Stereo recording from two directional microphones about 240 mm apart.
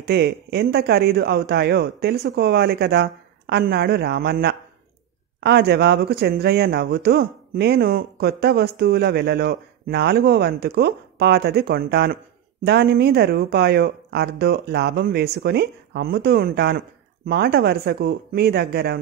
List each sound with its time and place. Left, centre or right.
0.0 s speech: right